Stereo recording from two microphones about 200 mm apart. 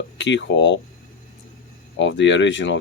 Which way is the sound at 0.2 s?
65° left (ahead or behind).